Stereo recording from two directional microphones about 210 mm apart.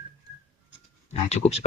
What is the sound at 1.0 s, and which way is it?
Speech, 30° left (ahead or behind).